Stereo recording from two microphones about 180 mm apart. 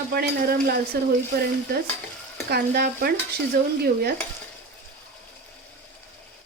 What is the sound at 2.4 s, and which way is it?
Stir, 60° right (ahead or behind).